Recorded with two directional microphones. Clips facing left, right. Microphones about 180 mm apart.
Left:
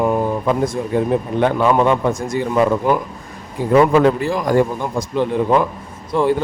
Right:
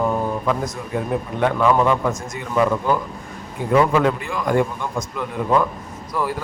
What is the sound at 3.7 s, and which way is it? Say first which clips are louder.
Speech: left 4 dB; 35° left (ahead or behind).